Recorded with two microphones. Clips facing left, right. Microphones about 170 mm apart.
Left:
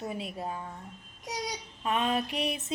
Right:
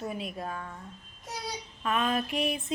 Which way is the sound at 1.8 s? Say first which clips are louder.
Even; 25° left (ahead or behind).